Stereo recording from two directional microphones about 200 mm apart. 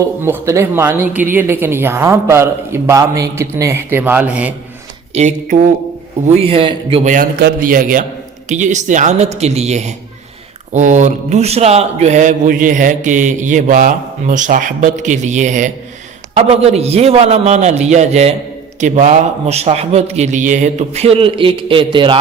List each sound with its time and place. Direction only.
0.0 s a woman's voice: 10° right (ahead or behind)
5.1 s a man's voice: 35° right (ahead or behind)
7.1 s a man's voice: 45° right (ahead or behind); by 22.2 s 25° right (ahead or behind)